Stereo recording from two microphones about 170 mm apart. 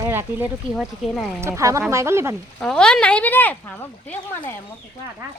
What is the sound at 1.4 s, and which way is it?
Speech, 15° right (ahead or behind).